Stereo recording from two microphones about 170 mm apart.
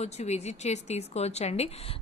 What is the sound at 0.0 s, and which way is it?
A woman's voice, 40° left (ahead or behind).